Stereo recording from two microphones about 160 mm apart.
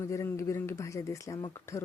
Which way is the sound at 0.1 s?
20° left (ahead or behind).